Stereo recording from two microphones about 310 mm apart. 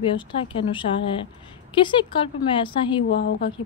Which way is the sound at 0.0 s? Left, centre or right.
Centre.